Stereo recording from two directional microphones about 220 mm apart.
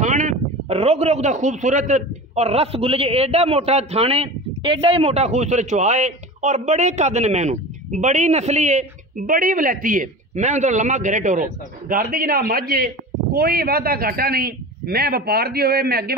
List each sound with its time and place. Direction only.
0.0 s a man's voice: 35° right (ahead or behind)